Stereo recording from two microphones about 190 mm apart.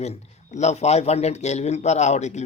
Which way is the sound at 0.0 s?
35° left (ahead or behind).